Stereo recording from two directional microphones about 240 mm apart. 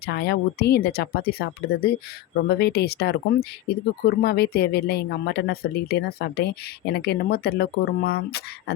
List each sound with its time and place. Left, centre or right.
0.0 s speech: left